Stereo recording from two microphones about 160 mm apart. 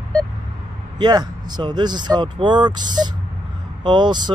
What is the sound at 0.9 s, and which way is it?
Speech, 25° right (ahead or behind).